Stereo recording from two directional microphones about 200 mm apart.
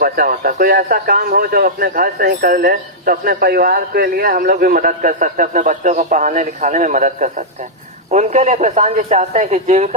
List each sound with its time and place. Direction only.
0.0 s a man's voice: 45° right (ahead or behind)